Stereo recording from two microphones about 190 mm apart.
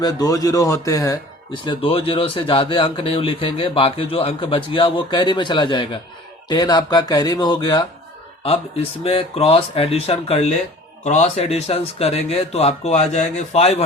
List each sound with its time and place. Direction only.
0.0 s speech: 20° left (ahead or behind)